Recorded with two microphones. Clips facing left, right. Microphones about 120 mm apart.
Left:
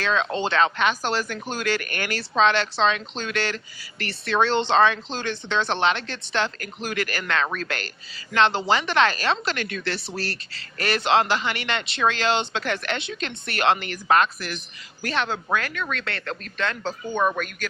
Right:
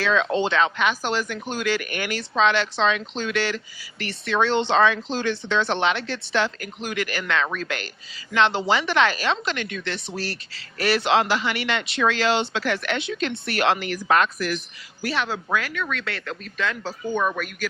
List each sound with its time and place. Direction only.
0.0 s speech: 10° right (ahead or behind)
16.4 s speech: 5° right (ahead or behind)
17.2 s speech: 25° left (ahead or behind)